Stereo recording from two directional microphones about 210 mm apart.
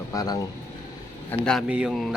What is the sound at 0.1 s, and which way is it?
Speech, 15° left (ahead or behind).